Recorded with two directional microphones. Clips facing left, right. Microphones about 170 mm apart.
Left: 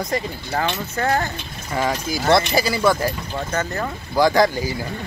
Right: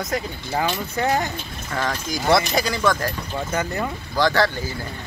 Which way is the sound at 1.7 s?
10° left (ahead or behind).